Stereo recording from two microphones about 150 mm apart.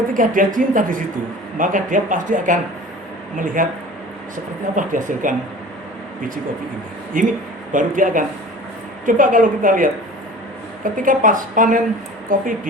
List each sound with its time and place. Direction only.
0.1 s speech: 65° right (ahead or behind)
4.7 s speech: 60° right (ahead or behind)
7.1 s speech: 65° right (ahead or behind)
10.9 s speech: 60° right (ahead or behind)